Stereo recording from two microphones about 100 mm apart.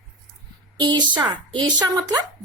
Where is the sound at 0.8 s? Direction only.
45° right (ahead or behind).